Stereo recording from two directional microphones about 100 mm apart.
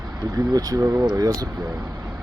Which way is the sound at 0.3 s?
35° right (ahead or behind).